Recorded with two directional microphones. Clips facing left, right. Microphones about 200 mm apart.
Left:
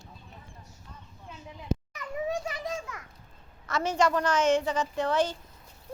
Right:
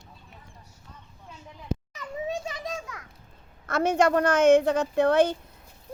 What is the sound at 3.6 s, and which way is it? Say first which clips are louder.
A woman's voice: right 4 dB; 55° right (ahead or behind).